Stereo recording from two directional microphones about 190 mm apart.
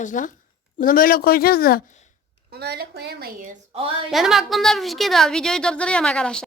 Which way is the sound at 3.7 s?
30° right (ahead or behind).